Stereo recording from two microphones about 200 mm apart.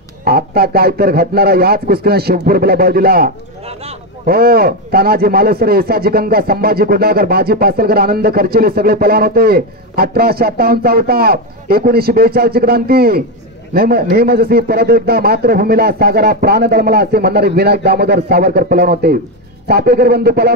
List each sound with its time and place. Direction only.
0.2 s speech: 50° right (ahead or behind)
4.3 s speech: 50° right (ahead or behind)